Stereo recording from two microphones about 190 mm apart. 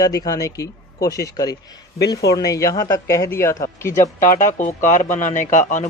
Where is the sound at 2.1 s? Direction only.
20° left (ahead or behind).